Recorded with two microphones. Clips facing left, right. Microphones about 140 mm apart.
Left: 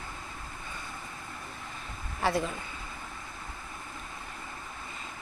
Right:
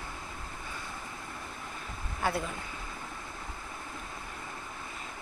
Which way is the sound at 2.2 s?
Centre (ahead or behind).